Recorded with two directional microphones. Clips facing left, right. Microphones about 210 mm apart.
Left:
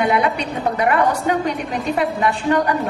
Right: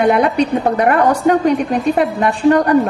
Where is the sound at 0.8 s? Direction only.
50° right (ahead or behind).